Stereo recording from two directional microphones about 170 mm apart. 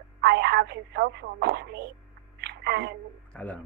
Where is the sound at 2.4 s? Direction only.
75° right (ahead or behind).